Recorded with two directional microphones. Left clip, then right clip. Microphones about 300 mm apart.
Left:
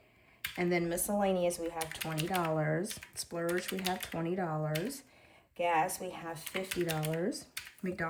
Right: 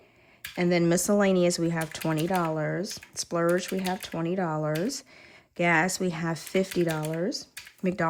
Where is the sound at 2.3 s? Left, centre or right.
Centre.